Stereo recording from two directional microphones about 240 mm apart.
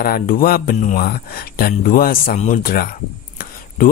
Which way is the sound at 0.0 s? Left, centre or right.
Left.